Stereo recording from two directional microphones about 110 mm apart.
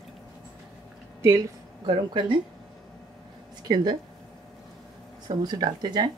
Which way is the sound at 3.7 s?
40° right (ahead or behind).